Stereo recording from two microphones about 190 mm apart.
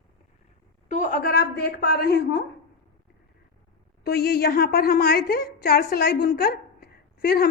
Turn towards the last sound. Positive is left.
turn(degrees=55)  # may be behind; listen again after turning